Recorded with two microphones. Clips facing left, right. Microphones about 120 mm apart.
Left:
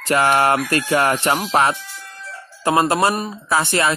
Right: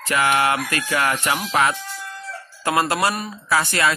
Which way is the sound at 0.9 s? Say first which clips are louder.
Left 4 dB; 30° left (ahead or behind).